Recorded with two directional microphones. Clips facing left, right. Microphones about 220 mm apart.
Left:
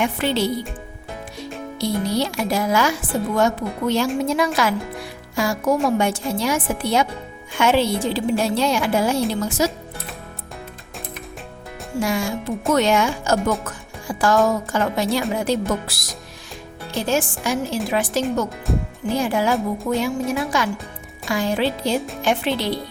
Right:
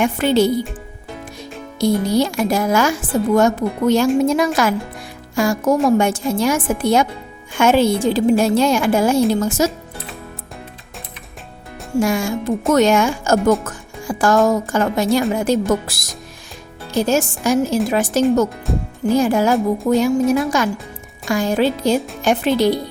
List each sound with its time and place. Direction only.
0.0 s a woman's voice: 45° right (ahead or behind)
1.8 s a woman's voice: 45° right (ahead or behind)
11.9 s a woman's voice: 45° right (ahead or behind)
18.7 s speech: centre (ahead or behind)
19.2 s a woman's voice: 45° right (ahead or behind)